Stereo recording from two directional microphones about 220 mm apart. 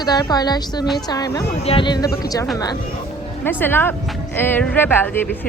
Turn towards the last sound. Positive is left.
turn(degrees=10)  # may be behind; listen again after turning